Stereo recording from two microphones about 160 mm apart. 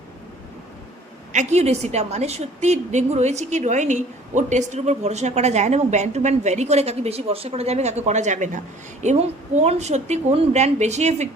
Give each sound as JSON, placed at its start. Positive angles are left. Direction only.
{"t": 1.3, "sound": "a woman's voice", "side_deg": -45}